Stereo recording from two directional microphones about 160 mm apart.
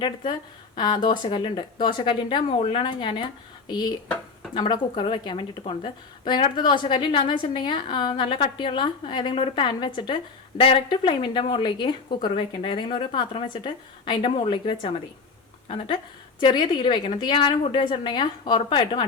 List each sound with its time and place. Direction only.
0.8 s a woman's voice: 30° left (ahead or behind)
4.5 s a woman's voice: 30° left (ahead or behind)
16.4 s a woman's voice: 30° left (ahead or behind)